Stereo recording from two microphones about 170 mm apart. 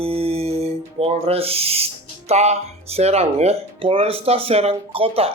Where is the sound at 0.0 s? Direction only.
35° right (ahead or behind).